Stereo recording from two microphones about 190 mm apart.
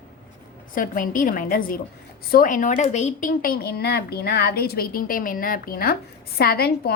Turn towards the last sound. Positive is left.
turn(degrees=55)  # may be behind; listen again after turning